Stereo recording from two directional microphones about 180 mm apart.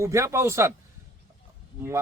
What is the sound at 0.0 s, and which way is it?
Speech, 15° right (ahead or behind).